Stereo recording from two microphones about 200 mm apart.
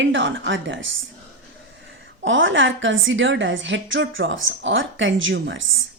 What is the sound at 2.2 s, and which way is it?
A woman's voice, 70° right (ahead or behind).